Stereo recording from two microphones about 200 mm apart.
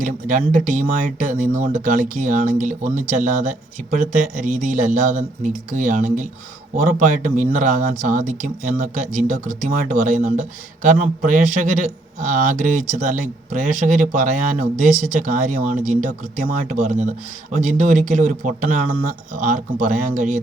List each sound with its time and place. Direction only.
0.0 s a man's voice: 40° right (ahead or behind)